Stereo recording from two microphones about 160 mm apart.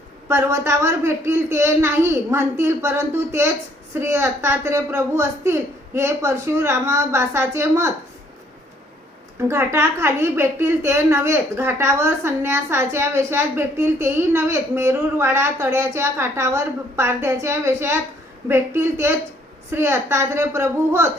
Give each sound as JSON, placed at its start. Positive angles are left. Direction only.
{"t": 0.3, "sound": "a woman's voice", "side_deg": -15}
{"t": 9.5, "sound": "a woman's voice", "side_deg": -15}